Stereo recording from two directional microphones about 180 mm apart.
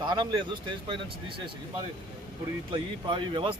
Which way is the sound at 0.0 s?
25° right (ahead or behind).